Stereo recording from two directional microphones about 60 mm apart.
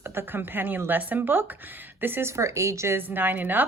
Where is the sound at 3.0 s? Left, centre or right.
Right.